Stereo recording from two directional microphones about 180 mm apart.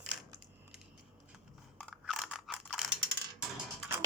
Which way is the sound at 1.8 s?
Centre (ahead or behind).